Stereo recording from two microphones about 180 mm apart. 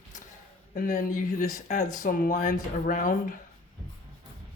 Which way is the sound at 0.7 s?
40° left (ahead or behind).